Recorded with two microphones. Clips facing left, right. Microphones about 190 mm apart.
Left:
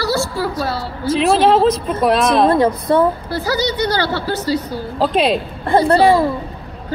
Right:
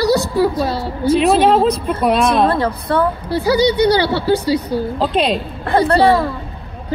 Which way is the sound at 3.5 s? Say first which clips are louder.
Right 6 dB; 10° right (ahead or behind).